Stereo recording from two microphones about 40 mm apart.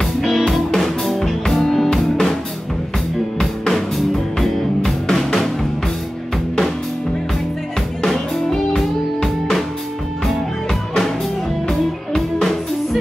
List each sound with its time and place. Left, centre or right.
0.0 s music: centre
3.3 s music: centre
8.1 s music: centre